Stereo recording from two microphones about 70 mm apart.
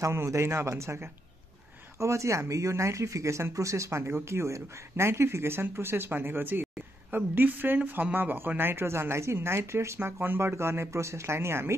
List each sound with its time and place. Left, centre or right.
0.0 s speech: right